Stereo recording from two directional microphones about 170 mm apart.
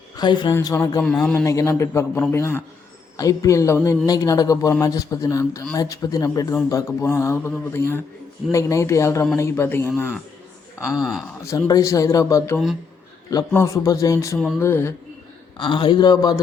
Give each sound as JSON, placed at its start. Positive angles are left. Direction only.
{"t": 0.2, "sound": "speech", "side_deg": 25}
{"t": 1.0, "sound": "a man's voice", "side_deg": 5}
{"t": 1.5, "sound": "speech", "side_deg": 20}
{"t": 10.9, "sound": "a man's voice", "side_deg": 0}
{"t": 11.7, "sound": "speech", "side_deg": 20}
{"t": 15.5, "sound": "speech", "side_deg": 30}